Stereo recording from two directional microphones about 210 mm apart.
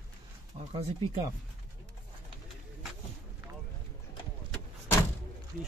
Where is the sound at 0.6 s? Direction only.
35° right (ahead or behind).